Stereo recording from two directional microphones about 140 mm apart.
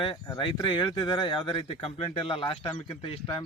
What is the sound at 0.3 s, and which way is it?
Speech, 35° left (ahead or behind).